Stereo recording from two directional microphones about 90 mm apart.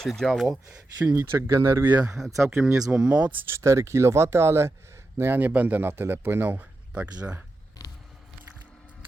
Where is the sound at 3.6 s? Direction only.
30° right (ahead or behind); by 7.1 s 15° right (ahead or behind).